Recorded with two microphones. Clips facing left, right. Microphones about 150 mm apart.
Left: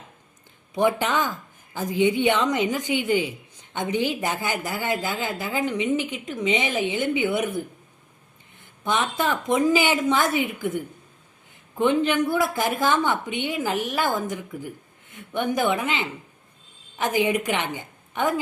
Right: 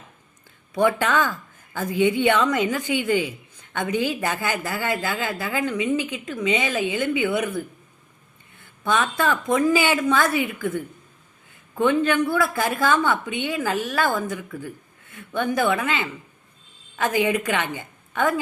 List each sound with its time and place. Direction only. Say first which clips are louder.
0.7 s speech: right 1 dB; 15° left (ahead or behind)
8.8 s a woman's voice: right 2 dB; 20° left (ahead or behind)